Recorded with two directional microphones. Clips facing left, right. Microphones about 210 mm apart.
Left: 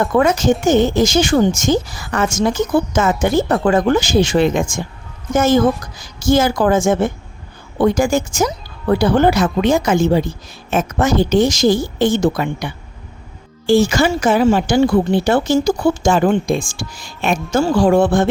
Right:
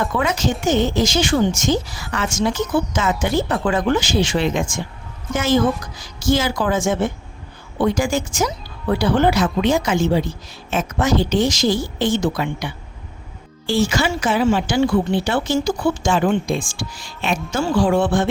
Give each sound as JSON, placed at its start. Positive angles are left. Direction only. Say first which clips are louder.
{"t": 0.0, "sound": "speech", "louder": "left 6 dB", "side_deg": 50}